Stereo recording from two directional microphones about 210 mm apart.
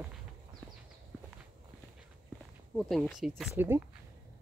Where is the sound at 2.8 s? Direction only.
Centre (ahead or behind).